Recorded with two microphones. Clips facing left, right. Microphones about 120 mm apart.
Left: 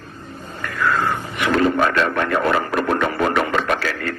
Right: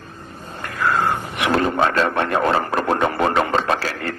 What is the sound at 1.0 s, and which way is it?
Radio, 25° right (ahead or behind).